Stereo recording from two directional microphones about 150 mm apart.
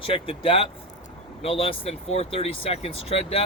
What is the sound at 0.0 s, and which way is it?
Speech, 35° left (ahead or behind).